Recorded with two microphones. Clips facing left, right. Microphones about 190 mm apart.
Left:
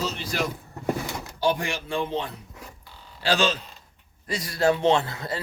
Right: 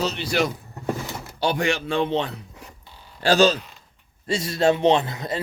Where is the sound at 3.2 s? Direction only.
45° right (ahead or behind).